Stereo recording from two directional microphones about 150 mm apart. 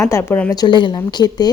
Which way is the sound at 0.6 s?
30° left (ahead or behind).